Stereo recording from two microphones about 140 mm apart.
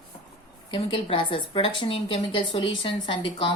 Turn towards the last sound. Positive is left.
turn(degrees=35)  # may be behind; listen again after turning